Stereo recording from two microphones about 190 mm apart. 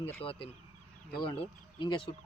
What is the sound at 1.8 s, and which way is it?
Speech, 25° left (ahead or behind).